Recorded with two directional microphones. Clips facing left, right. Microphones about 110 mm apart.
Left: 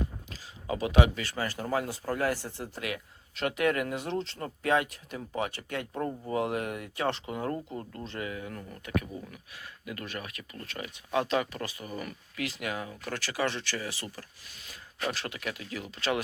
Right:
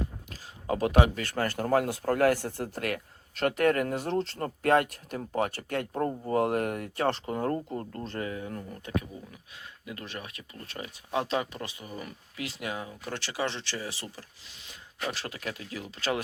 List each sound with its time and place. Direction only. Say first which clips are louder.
0.7 s speech: right 2 dB; 50° right (ahead or behind)
1.2 s speech: right 4 dB; 55° right (ahead or behind); by 14.1 s 25° right (ahead or behind)
15.1 s speech: even; 35° right (ahead or behind)